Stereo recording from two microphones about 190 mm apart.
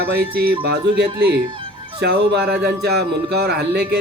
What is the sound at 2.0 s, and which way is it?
Speech, 60° right (ahead or behind).